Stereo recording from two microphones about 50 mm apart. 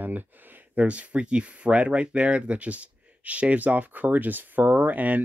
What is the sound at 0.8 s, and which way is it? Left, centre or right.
Speech, right.